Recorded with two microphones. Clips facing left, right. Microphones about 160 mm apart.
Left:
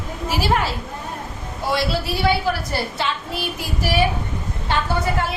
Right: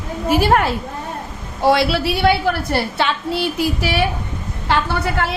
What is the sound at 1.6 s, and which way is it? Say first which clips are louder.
A woman's voice: right 7 dB; 75° right (ahead or behind).